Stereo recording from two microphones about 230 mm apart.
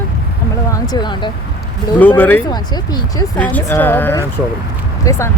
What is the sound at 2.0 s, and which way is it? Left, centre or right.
Speech, centre.